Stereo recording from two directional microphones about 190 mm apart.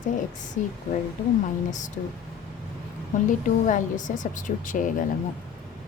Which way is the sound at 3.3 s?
40° left (ahead or behind).